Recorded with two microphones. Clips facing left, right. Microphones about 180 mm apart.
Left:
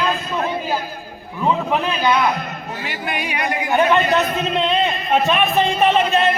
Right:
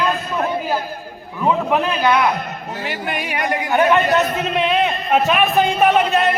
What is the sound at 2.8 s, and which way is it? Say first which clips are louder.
Speech: right 1 dB; 60° right (ahead or behind).